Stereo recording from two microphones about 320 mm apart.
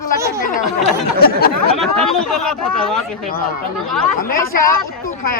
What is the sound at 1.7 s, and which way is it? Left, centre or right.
Speech, centre.